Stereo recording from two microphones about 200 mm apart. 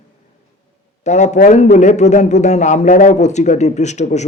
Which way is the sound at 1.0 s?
35° left (ahead or behind).